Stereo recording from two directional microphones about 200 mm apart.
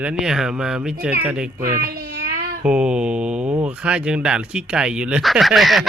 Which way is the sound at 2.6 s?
5° right (ahead or behind).